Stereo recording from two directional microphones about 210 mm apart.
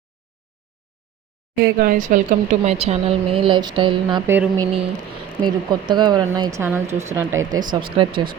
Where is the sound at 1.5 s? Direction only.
50° right (ahead or behind); by 7.6 s 10° right (ahead or behind).